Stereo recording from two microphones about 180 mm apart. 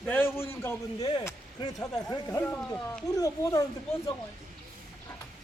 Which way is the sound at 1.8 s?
20° left (ahead or behind).